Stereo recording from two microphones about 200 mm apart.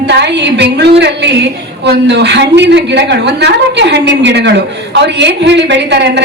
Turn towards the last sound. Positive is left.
turn(degrees=-60)  # may be behind; listen again after turning